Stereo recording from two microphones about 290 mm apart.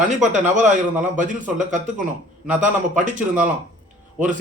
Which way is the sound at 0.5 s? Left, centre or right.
Right.